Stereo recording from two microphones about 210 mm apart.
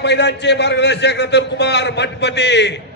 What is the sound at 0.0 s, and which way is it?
A man's voice, 55° left (ahead or behind).